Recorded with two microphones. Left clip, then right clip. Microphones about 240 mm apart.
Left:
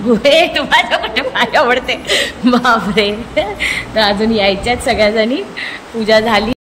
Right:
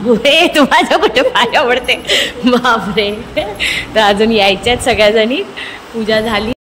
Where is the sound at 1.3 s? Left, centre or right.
Centre.